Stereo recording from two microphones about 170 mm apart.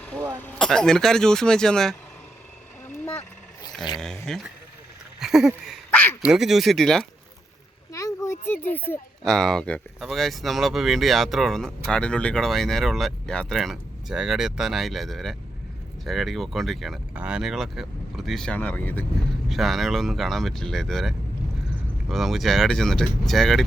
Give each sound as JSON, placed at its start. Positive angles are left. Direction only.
{"t": 0.4, "sound": "speech", "side_deg": 5}
{"t": 2.8, "sound": "vehicle", "side_deg": 10}
{"t": 3.9, "sound": "speech", "side_deg": 5}
{"t": 7.9, "sound": "speech", "side_deg": 15}
{"t": 19.5, "sound": "speech", "side_deg": 0}